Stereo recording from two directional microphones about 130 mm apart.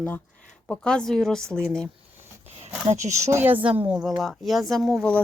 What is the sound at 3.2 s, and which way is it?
A woman's voice, 15° right (ahead or behind).